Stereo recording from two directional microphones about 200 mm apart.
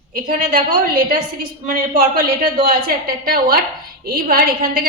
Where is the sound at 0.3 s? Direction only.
45° right (ahead or behind).